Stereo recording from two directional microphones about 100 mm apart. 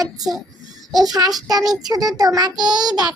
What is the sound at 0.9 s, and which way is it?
Speech, centre (ahead or behind).